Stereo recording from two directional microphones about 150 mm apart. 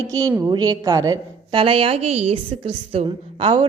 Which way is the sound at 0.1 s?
20° right (ahead or behind).